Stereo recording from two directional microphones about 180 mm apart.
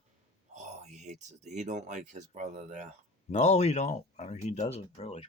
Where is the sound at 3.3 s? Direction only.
40° left (ahead or behind).